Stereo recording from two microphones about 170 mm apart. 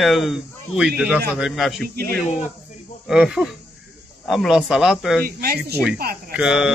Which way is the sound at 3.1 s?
5° right (ahead or behind).